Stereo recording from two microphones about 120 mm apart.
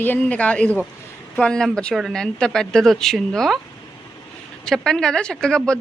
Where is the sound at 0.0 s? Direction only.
15° left (ahead or behind).